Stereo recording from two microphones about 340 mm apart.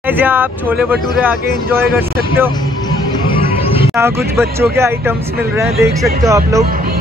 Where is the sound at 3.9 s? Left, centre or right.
Centre.